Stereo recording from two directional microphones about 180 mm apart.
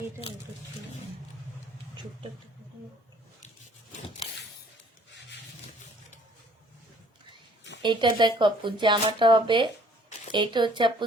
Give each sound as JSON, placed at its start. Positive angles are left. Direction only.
{"t": 7.8, "sound": "speech", "side_deg": -25}